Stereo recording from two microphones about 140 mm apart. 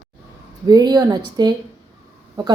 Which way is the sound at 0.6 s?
30° right (ahead or behind).